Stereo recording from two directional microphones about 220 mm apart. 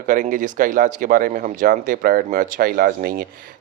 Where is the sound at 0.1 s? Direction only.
35° right (ahead or behind).